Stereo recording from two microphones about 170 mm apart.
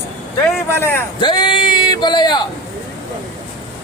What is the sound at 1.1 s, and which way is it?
A man's voice, 25° left (ahead or behind).